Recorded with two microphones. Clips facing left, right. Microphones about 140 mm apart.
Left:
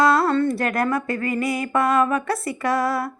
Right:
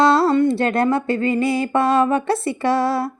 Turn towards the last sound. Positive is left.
turn(degrees=-30)  # may be behind; listen again after turning